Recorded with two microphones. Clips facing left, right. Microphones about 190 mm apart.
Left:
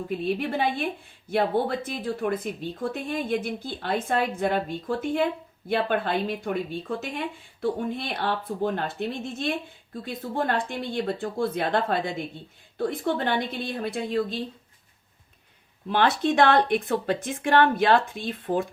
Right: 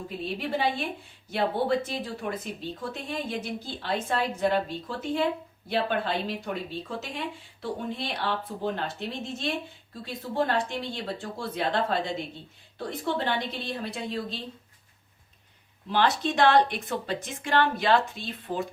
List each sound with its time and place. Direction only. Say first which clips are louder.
0.3 s speech: left 2 dB; 55° left (ahead or behind)
15.9 s speech: left 3 dB; 55° left (ahead or behind)